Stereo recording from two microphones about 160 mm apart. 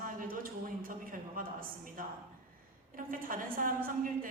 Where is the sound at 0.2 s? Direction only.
60° right (ahead or behind).